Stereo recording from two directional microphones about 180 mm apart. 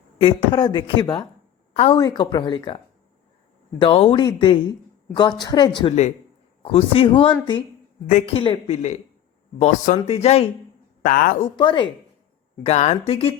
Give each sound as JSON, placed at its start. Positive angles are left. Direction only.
{"t": 0.2, "sound": "speech", "side_deg": 25}
{"t": 1.7, "sound": "a woman's voice", "side_deg": 35}
{"t": 2.0, "sound": "speech", "side_deg": 25}
{"t": 11.0, "sound": "speech", "side_deg": 50}
{"t": 11.4, "sound": "speech", "side_deg": 25}
{"t": 12.6, "sound": "speech", "side_deg": 35}